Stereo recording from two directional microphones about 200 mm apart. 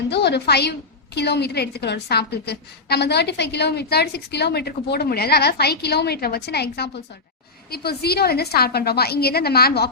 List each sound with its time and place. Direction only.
0.1 s a woman's voice: 55° left (ahead or behind)